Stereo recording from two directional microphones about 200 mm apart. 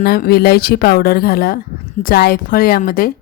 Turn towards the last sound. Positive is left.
turn(degrees=45)  # may be behind; listen again after turning